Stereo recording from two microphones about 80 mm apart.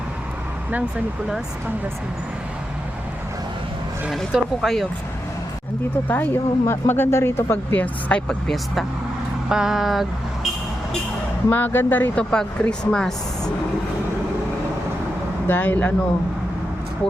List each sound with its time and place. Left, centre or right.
4.1 s speech: centre
6.1 s speech: left
8.4 s speech: centre
9.5 s speech: centre
11.4 s speech: left
12.3 s speech: centre
15.4 s speech: left